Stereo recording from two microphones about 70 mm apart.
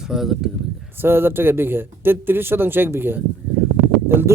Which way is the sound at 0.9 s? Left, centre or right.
Right.